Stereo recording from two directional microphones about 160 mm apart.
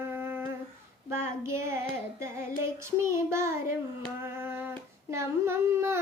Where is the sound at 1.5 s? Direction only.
15° right (ahead or behind).